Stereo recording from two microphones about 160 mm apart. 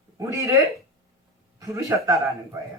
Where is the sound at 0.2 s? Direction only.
20° right (ahead or behind).